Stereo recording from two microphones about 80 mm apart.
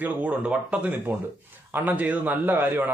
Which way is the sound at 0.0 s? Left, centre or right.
Centre.